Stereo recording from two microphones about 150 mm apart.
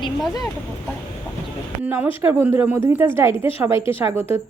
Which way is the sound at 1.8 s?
10° right (ahead or behind).